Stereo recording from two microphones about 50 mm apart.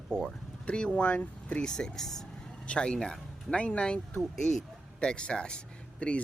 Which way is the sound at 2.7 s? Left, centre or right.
Centre.